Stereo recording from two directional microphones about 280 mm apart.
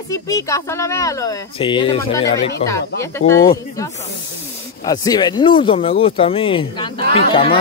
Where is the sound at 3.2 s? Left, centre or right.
Left.